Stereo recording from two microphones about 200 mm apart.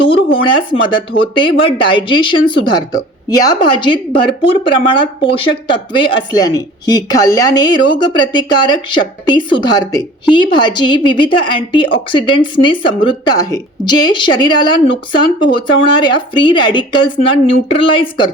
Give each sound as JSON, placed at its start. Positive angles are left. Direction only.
{"t": 0.4, "sound": "a woman's voice", "side_deg": 25}